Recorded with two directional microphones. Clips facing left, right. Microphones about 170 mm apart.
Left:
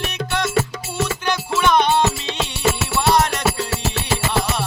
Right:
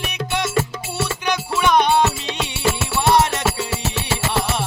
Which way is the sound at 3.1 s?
25° right (ahead or behind).